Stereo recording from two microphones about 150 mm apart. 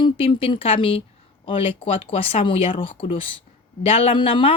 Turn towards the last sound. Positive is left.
turn(degrees=35)  # may be behind; listen again after turning